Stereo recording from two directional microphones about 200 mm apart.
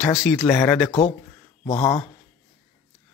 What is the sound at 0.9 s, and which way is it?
Speech, 30° left (ahead or behind).